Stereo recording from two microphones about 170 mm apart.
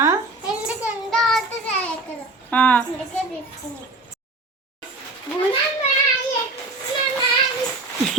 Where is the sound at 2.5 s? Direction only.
10° left (ahead or behind).